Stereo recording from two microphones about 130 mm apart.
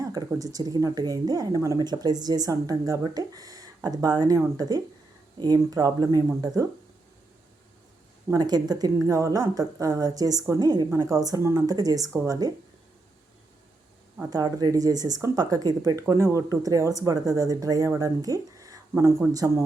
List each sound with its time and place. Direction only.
0.0 s a sound: 30° right (ahead or behind)
0.3 s speech: 30° right (ahead or behind)
8.3 s speech: 30° right (ahead or behind)
14.3 s speech: 30° right (ahead or behind)